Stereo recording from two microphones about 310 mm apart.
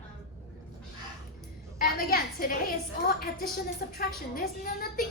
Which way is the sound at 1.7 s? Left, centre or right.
Left.